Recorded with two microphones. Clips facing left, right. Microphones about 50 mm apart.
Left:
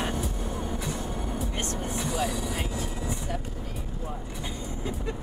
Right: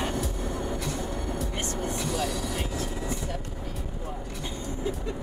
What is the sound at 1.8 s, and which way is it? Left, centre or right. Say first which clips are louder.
Vehicle: even; centre.